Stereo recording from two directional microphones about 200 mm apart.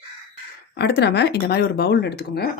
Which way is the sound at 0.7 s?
55° left (ahead or behind).